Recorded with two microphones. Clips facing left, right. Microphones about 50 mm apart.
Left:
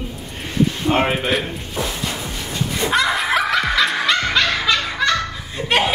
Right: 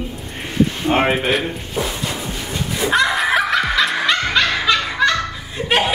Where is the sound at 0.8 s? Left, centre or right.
Centre.